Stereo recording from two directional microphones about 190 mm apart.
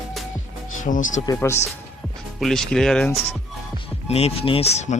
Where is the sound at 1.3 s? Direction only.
15° left (ahead or behind).